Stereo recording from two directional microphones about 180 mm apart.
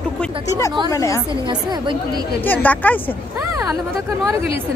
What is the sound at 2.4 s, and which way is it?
Speech, 10° left (ahead or behind).